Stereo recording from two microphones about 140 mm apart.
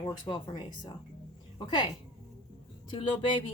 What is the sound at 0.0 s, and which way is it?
Speech, 35° left (ahead or behind).